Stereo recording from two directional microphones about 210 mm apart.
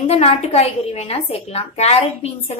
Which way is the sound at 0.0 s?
30° left (ahead or behind).